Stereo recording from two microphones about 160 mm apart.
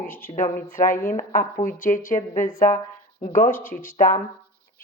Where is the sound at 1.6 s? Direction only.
55° left (ahead or behind).